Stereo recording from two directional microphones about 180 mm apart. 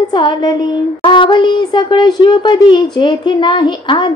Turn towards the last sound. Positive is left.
turn(degrees=25)  # may be behind; listen again after turning